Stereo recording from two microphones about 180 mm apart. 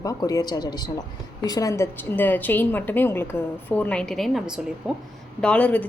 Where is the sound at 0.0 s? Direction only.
20° left (ahead or behind).